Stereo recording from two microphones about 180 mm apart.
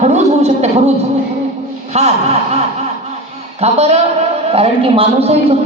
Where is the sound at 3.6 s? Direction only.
35° right (ahead or behind).